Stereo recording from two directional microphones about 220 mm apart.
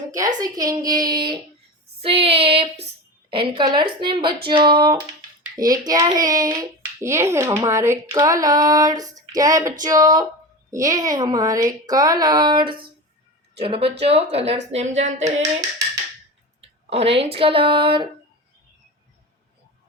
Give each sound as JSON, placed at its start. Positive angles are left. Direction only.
{"t": 0.3, "sound": "a child's voice", "side_deg": -15}
{"t": 16.6, "sound": "clicking", "side_deg": -25}
{"t": 17.3, "sound": "speech", "side_deg": -25}